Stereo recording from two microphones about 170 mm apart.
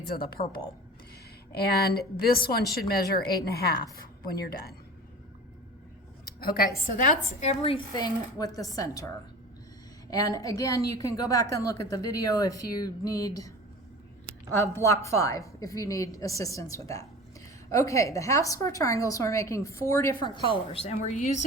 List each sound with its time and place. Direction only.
0.2 s a woman's voice: 60° left (ahead or behind)
6.4 s a woman's voice: 60° left (ahead or behind); by 9.0 s 20° left (ahead or behind)
10.1 s a woman's voice: 20° left (ahead or behind)
14.5 s a woman's voice: 15° left (ahead or behind); by 21.4 s 45° left (ahead or behind)